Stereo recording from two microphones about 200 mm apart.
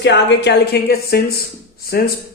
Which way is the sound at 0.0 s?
60° left (ahead or behind).